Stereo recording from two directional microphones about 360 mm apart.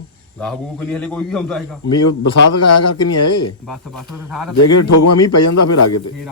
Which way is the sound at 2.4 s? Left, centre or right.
Left.